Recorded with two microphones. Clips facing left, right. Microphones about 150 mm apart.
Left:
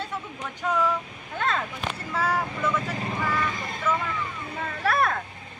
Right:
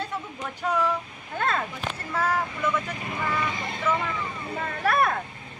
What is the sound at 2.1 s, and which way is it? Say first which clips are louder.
Speech: even; 10° left (ahead or behind).